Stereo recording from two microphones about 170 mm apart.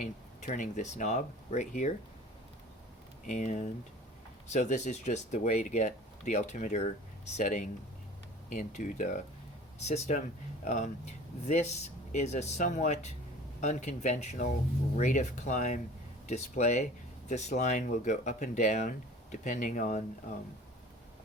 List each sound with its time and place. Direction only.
0.0 s speech: 50° left (ahead or behind)
3.2 s speech: 50° left (ahead or behind)